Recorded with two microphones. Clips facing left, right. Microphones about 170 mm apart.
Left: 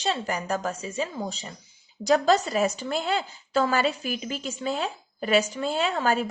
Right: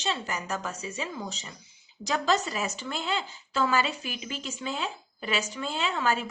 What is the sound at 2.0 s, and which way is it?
Speech, 50° left (ahead or behind).